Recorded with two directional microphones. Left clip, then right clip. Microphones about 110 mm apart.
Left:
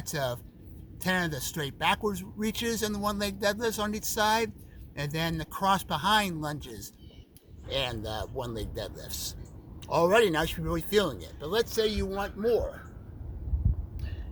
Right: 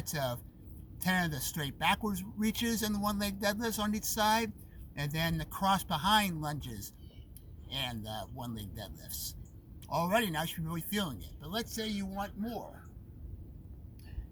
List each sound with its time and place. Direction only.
0.0 s speech: 40° left (ahead or behind)